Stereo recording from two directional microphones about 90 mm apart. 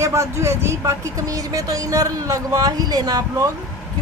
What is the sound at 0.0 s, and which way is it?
Speech, 30° right (ahead or behind).